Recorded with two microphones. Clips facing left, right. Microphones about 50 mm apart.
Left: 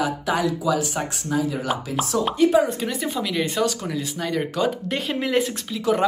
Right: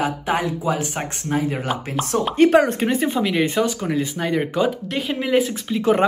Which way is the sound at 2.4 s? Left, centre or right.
Right.